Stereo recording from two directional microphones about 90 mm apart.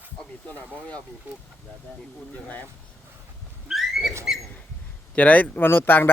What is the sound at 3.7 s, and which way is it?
Pig, 5° right (ahead or behind).